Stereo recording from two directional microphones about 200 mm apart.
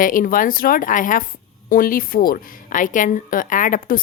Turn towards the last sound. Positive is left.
turn(degrees=45)  # may be behind; listen again after turning